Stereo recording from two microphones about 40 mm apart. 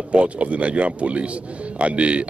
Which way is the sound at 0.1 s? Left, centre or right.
Right.